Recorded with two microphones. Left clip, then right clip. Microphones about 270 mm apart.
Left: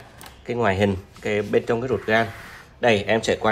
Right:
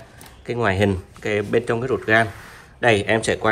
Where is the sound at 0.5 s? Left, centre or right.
Right.